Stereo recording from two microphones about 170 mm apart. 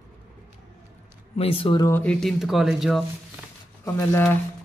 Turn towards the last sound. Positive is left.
turn(degrees=15)  # may be behind; listen again after turning